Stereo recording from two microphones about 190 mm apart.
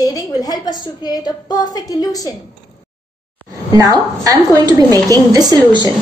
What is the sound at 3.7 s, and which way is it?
Speech, 20° right (ahead or behind).